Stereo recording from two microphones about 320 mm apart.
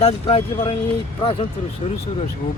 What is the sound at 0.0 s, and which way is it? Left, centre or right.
Speech, centre.